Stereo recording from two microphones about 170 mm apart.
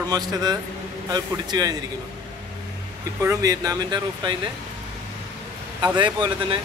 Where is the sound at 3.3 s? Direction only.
20° right (ahead or behind).